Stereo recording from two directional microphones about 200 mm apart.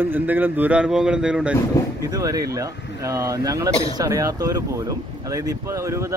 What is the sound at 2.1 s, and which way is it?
A man's voice, 20° right (ahead or behind).